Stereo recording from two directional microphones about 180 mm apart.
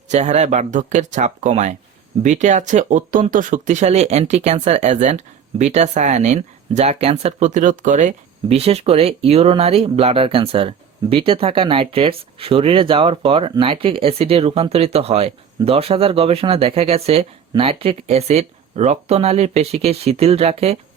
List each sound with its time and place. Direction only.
0.1 s speech: 40° right (ahead or behind)